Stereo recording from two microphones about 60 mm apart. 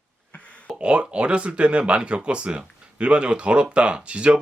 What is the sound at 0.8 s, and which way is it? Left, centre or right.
Speech, centre.